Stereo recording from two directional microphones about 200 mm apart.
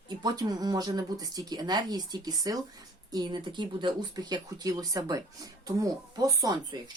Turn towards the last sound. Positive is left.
turn(degrees=-15)  # may be behind; listen again after turning